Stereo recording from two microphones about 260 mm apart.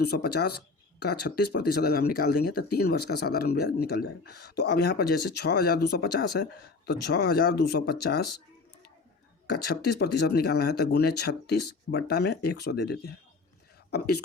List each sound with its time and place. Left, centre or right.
0.0 s speech: left
9.5 s speech: left